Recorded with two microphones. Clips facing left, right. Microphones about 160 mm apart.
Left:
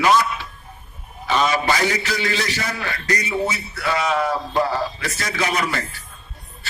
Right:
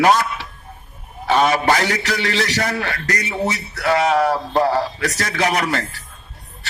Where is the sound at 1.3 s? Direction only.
55° right (ahead or behind).